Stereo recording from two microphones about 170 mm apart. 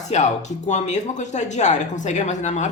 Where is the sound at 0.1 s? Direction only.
40° left (ahead or behind).